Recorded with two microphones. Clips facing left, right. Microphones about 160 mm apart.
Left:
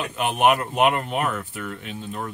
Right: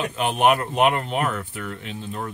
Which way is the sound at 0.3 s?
15° left (ahead or behind).